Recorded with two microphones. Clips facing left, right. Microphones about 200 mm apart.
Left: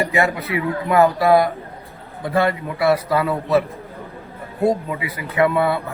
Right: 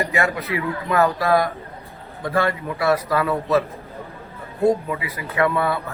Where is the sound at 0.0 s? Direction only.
20° left (ahead or behind).